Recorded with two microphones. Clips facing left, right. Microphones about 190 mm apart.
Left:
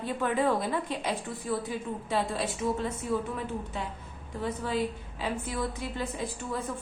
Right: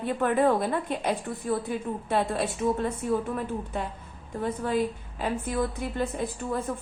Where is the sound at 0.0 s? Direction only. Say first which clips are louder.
Right 4 dB; 55° right (ahead or behind).